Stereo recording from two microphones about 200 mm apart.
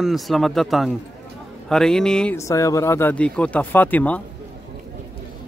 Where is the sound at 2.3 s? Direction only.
15° left (ahead or behind).